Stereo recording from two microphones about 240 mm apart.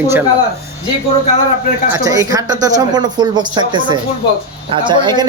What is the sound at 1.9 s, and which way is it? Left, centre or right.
Speech, centre.